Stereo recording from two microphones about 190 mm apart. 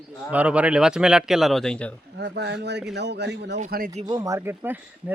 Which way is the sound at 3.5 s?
45° right (ahead or behind).